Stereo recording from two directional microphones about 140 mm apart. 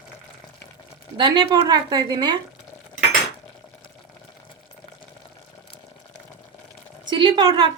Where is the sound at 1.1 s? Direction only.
35° right (ahead or behind).